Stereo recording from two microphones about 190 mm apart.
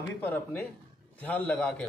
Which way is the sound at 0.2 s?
10° left (ahead or behind).